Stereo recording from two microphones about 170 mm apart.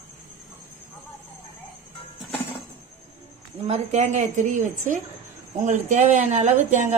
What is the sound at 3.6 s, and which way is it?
Speech, 40° right (ahead or behind).